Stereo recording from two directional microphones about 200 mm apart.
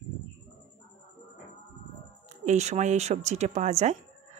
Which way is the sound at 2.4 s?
35° right (ahead or behind).